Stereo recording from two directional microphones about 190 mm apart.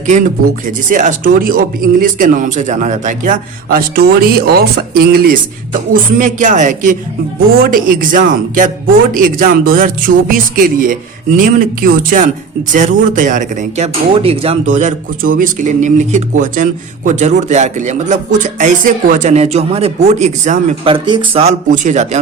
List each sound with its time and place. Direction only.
0.9 s speech: 40° right (ahead or behind)
3.8 s speech: 55° right (ahead or behind)
20.8 s speech: 25° right (ahead or behind)